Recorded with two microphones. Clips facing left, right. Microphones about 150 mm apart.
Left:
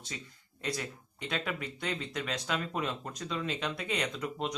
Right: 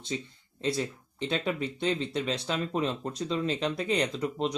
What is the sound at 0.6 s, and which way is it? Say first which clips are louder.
Speech: right 7 dB; 30° right (ahead or behind).